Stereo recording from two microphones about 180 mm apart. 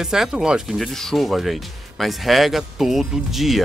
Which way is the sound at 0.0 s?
5° right (ahead or behind).